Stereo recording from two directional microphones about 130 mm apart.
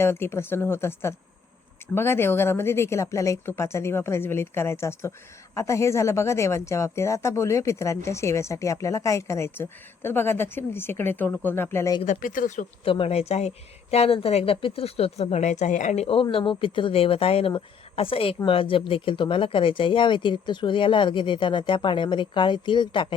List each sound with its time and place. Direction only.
0.0 s a woman's voice: 20° left (ahead or behind)
12.0 s speech: 90° left
12.8 s speech: 45° left (ahead or behind); by 16.0 s 70° left (ahead or behind)
16.3 s speech: 40° left (ahead or behind)